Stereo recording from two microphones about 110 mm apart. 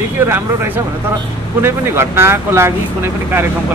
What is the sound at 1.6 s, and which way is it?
Speech, 25° right (ahead or behind).